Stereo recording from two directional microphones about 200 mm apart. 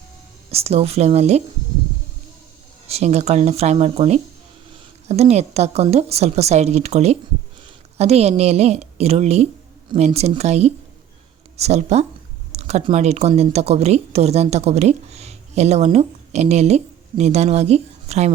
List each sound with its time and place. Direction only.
0.5 s speech: 30° right (ahead or behind)
2.8 s speech: 30° right (ahead or behind)